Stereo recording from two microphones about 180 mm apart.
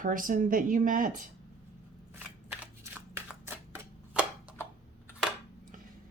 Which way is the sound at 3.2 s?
10° right (ahead or behind).